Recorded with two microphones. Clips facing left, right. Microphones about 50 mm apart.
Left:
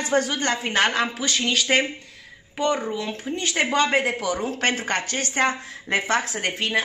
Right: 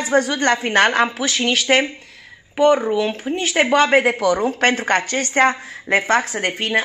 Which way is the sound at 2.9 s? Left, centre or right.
Right.